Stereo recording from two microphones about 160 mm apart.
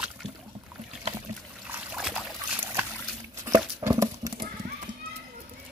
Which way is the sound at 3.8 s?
20° right (ahead or behind).